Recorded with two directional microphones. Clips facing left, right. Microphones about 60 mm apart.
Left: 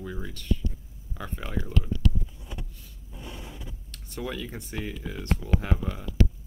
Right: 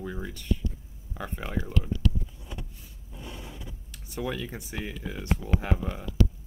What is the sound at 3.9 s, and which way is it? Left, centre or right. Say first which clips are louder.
Speech: right 2 dB; centre.